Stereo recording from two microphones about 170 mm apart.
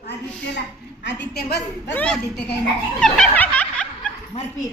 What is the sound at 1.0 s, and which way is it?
Speech, 80° left.